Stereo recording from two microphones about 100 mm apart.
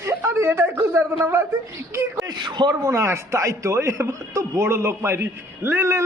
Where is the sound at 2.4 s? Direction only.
50° right (ahead or behind).